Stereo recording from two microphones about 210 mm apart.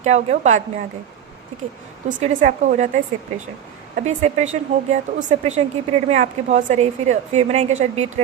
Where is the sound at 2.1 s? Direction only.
35° right (ahead or behind).